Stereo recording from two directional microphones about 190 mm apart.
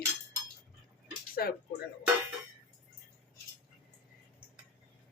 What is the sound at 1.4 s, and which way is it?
Speech, 55° left (ahead or behind).